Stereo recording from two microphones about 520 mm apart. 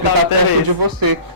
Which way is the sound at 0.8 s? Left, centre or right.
Right.